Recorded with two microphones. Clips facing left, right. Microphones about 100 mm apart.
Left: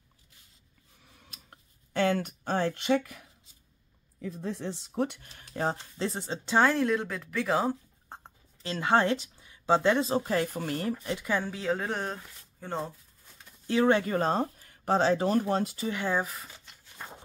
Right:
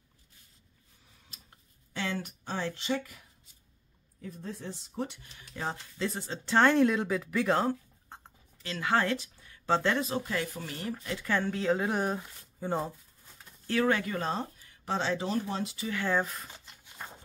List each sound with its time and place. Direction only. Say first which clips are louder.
2.0 s speech: left 8 dB; 55° left (ahead or behind)
4.3 s speech: left 5 dB; 90° left; by 5.3 s 60° left (ahead or behind)
5.3 s speech: left 6 dB; 40° left (ahead or behind)
6.3 s speech: left 1 dB; 15° left (ahead or behind)
6.6 s speech: right 2 dB; centre (ahead or behind)
8.2 s a sound: left 4 dB; 25° left (ahead or behind)
10.0 s speech: left 5 dB; 35° left (ahead or behind); by 11.0 s 50° left (ahead or behind)
11.1 s speech: even; 15° left (ahead or behind)
11.6 s speech: right 2 dB; centre (ahead or behind)
13.7 s speech: left 4 dB; 25° left (ahead or behind)
14.1 s speech: left 6 dB; 45° left (ahead or behind)
15.9 s speech: right 1 dB; 15° left (ahead or behind)
16.3 s speech: even; centre (ahead or behind)
17.0 s walk: left 1 dB; centre (ahead or behind)